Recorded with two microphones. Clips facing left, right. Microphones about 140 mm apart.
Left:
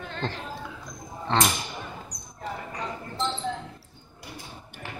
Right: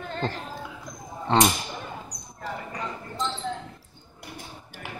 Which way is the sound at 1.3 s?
15° right (ahead or behind).